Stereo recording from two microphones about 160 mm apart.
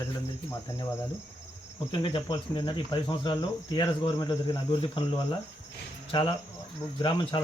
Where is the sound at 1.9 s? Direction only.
30° left (ahead or behind).